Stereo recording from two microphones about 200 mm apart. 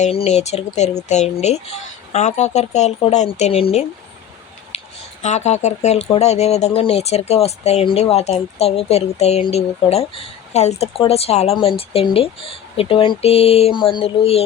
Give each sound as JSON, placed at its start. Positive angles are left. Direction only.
{"t": 0.0, "sound": "speech", "side_deg": 30}
{"t": 4.7, "sound": "a sound", "side_deg": 30}
{"t": 5.2, "sound": "speech", "side_deg": 35}